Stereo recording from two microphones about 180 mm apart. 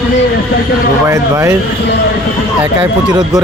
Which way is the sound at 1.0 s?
15° right (ahead or behind).